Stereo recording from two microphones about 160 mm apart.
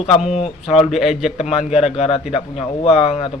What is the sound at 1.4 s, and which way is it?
Speech, 40° left (ahead or behind).